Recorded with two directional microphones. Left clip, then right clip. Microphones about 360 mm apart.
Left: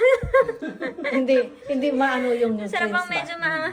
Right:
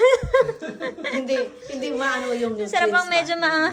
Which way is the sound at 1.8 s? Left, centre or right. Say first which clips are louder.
Left 2 dB; centre.